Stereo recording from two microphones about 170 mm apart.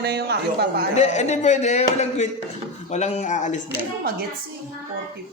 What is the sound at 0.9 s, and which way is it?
Speech, 40° left (ahead or behind).